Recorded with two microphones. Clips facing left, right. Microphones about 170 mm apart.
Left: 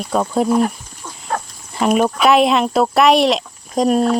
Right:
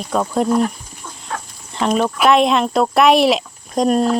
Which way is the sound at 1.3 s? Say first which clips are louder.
Left 5 dB; 45° left (ahead or behind).